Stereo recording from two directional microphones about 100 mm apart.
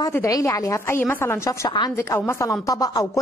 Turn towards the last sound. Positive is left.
turn(degrees=35)  # may be behind; listen again after turning